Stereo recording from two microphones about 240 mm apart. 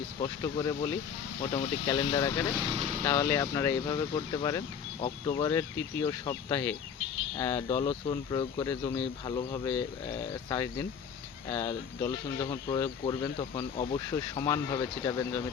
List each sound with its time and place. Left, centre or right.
0.2 s speech: centre
2.5 s speech: centre
2.7 s speech: right
3.0 s speech: centre